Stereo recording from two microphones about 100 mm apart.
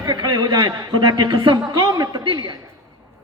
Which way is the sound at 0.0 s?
45° right (ahead or behind).